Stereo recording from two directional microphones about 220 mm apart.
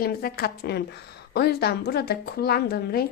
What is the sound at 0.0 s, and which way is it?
A woman's voice, 45° left (ahead or behind).